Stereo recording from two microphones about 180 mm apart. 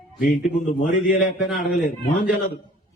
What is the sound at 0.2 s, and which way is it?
Speech, 50° left (ahead or behind).